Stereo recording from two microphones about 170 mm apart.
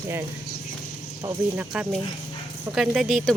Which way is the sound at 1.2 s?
15° right (ahead or behind).